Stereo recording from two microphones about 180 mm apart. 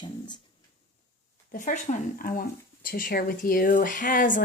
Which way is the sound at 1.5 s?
45° left (ahead or behind).